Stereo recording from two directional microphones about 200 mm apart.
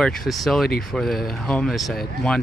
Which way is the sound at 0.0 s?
Centre (ahead or behind).